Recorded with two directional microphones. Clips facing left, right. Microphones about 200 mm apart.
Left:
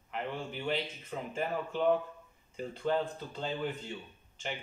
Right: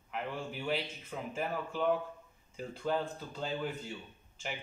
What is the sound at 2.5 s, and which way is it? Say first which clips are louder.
Speech: left 2 dB; 5° right (ahead or behind).